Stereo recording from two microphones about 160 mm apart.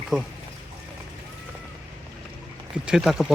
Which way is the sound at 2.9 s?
Centre (ahead or behind).